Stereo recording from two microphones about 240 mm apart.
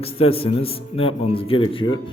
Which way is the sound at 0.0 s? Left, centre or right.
Left.